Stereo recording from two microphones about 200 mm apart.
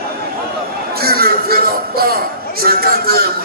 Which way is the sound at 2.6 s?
50° right (ahead or behind).